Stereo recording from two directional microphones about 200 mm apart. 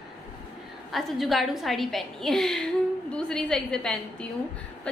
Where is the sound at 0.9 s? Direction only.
Centre (ahead or behind).